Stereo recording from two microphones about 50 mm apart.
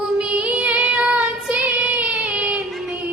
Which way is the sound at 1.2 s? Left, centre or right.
Right.